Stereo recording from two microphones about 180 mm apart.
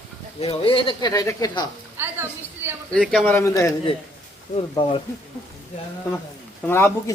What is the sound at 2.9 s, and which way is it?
Speech, 5° left (ahead or behind).